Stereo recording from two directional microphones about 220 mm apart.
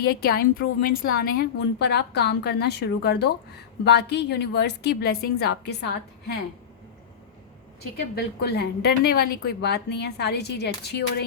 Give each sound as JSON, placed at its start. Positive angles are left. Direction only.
{"t": 0.0, "sound": "a woman's voice", "side_deg": 45}
{"t": 7.9, "sound": "a woman's voice", "side_deg": 45}